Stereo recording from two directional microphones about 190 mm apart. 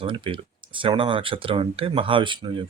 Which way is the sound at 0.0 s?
25° right (ahead or behind).